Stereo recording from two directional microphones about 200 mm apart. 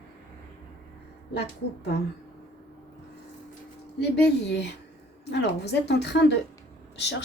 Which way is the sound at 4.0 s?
55° left (ahead or behind).